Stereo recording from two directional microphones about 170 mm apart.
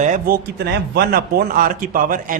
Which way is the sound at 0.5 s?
70° right (ahead or behind).